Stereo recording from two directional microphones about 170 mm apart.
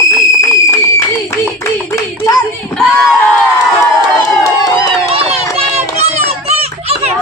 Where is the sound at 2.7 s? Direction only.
5° left (ahead or behind).